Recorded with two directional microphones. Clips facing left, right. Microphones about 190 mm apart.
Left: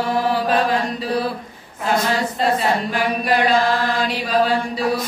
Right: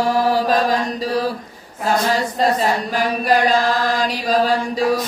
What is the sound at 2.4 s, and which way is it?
Music, 40° right (ahead or behind).